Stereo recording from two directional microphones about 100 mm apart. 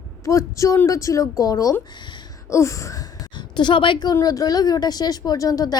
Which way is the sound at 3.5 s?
55° left (ahead or behind).